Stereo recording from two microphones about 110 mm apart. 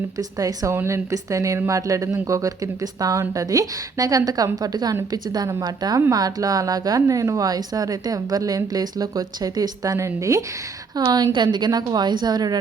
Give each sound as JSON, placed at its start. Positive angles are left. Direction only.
{"t": 0.2, "sound": "speech", "side_deg": -35}
{"t": 11.1, "sound": "speech", "side_deg": -40}